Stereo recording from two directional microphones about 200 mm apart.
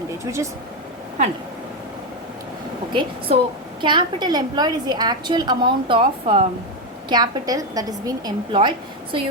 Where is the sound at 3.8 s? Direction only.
25° right (ahead or behind).